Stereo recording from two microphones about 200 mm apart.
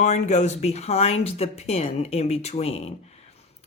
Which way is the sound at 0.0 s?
35° left (ahead or behind).